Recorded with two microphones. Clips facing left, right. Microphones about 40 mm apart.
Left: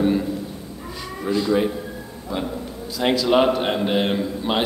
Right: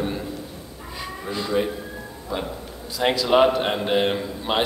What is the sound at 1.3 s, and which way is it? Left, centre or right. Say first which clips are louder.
Speech: left 4 dB; centre.